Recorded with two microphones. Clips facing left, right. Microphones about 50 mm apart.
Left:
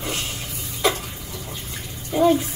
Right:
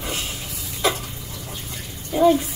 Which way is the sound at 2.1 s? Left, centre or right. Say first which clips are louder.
Right 1 dB; centre.